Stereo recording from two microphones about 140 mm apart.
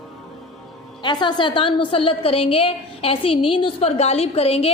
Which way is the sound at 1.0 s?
35° left (ahead or behind).